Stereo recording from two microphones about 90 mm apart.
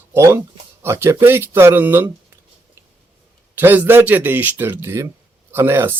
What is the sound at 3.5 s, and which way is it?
Speech, 20° right (ahead or behind).